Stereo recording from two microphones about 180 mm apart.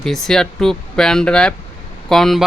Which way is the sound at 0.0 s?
Centre (ahead or behind).